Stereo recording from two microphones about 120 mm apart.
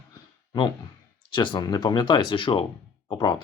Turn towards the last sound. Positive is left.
turn(degrees=40)  # may be behind; listen again after turning